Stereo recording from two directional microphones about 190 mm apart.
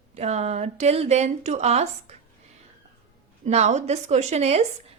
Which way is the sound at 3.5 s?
35° right (ahead or behind).